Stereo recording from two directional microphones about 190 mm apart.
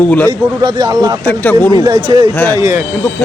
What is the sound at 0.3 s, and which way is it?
Speech, 20° right (ahead or behind).